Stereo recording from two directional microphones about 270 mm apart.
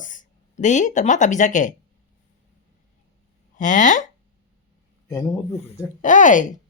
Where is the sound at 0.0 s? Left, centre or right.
Left.